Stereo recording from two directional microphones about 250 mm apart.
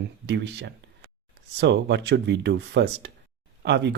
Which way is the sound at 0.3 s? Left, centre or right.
Right.